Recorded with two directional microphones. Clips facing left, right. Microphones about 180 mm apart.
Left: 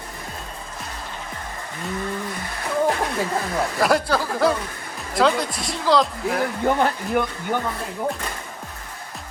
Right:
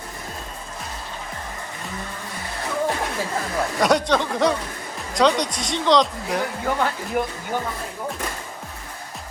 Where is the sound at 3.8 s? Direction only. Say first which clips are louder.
Right 2 dB; centre (ahead or behind).